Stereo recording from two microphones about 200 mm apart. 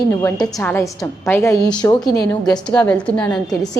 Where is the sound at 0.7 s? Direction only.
15° left (ahead or behind).